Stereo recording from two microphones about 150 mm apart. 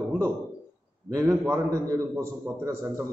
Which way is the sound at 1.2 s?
15° right (ahead or behind).